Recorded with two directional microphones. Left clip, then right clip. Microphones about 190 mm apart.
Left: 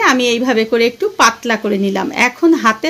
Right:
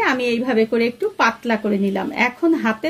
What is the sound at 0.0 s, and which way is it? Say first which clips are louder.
Speech: left 6 dB; 25° left (ahead or behind).